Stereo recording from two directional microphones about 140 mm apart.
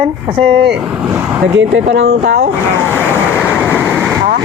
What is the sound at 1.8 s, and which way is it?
Speech, 65° right (ahead or behind).